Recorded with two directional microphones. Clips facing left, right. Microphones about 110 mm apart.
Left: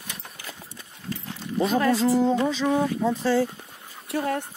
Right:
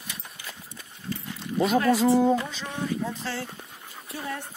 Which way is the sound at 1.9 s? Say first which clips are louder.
Right 2 dB; 15° right (ahead or behind).